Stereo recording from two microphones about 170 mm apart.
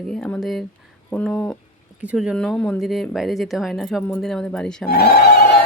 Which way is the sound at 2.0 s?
5° right (ahead or behind).